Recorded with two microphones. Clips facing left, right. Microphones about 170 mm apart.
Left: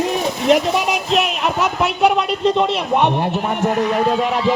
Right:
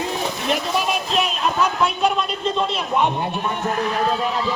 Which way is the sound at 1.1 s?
70° left (ahead or behind).